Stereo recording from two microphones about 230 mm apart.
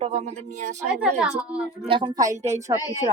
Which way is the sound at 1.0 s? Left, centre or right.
Centre.